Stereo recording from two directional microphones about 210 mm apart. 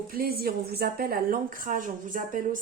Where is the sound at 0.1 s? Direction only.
45° right (ahead or behind).